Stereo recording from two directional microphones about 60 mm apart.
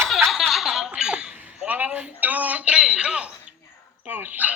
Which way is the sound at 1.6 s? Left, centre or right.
Right.